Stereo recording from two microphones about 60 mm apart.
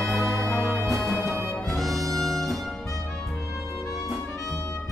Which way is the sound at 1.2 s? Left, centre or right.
Right.